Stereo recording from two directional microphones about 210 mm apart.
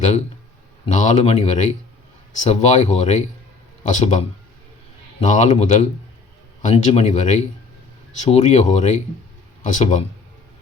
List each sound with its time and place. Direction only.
0.9 s speech: 35° left (ahead or behind)
5.2 s speech: 35° left (ahead or behind)